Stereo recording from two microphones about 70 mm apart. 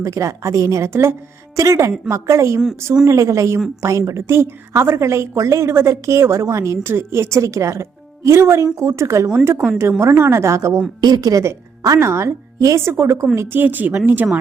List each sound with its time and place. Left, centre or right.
0.0 s a woman's voice: right
1.5 s a woman's voice: right
11.0 s a woman's voice: right
11.9 s a woman's voice: right
12.8 s a woman's voice: right
13.6 s speech: right